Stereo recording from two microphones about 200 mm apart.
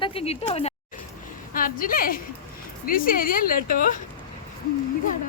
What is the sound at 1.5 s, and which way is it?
A woman's voice, 45° left (ahead or behind).